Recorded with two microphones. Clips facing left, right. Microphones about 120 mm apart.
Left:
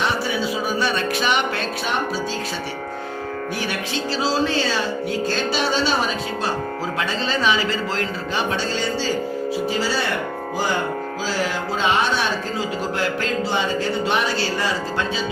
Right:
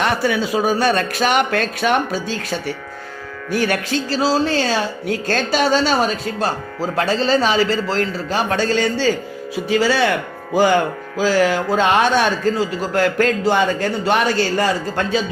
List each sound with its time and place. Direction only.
0.0 s speech: 55° right (ahead or behind)
6.9 s a man's voice: 40° right (ahead or behind); by 10.1 s 70° right (ahead or behind)
11.2 s speech: 60° right (ahead or behind)